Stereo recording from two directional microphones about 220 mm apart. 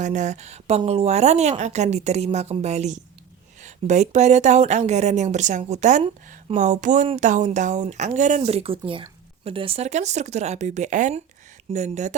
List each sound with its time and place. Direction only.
0.0 s speech: 35° right (ahead or behind)